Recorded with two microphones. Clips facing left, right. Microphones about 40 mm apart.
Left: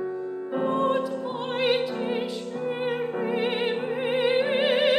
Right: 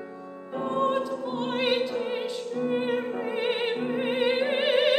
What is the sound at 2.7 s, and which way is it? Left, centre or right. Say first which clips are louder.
Opera: even; centre.